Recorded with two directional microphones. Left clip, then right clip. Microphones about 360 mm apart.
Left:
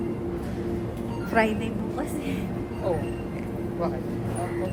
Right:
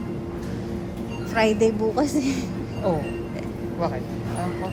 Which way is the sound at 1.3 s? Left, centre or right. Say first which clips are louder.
Right 2 dB; centre.